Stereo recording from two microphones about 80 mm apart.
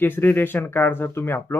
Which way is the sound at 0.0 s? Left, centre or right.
Left.